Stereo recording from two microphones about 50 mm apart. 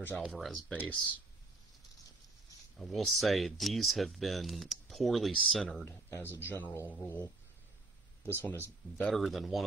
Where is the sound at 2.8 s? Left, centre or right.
Centre.